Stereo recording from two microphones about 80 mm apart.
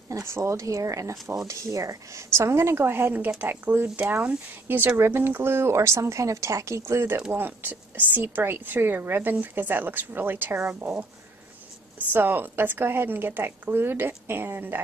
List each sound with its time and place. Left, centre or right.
0.1 s speech: right
12.1 s speech: right